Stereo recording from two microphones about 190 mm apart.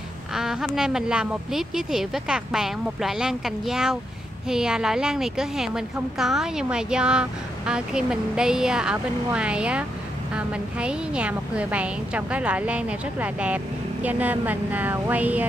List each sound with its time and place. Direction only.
0.3 s a woman's voice: 5° right (ahead or behind)